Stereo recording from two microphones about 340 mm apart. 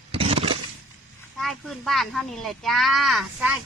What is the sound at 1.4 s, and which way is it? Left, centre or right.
Speech, centre.